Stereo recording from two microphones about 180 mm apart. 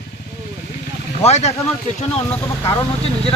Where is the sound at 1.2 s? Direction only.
35° left (ahead or behind).